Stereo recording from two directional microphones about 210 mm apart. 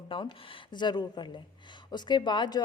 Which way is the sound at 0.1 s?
25° left (ahead or behind).